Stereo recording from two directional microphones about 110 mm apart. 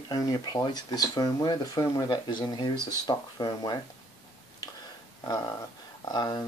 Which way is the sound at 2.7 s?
25° right (ahead or behind).